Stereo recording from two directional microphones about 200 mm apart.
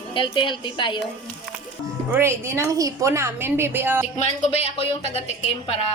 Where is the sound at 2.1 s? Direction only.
10° right (ahead or behind).